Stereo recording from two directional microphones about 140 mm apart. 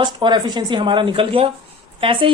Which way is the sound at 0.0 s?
35° right (ahead or behind).